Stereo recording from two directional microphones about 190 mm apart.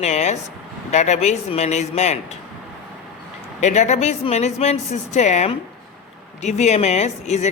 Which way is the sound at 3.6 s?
40° left (ahead or behind).